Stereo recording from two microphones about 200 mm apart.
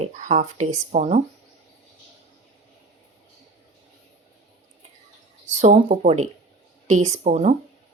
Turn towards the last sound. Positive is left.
turn(degrees=-35)  # may be behind; listen again after turning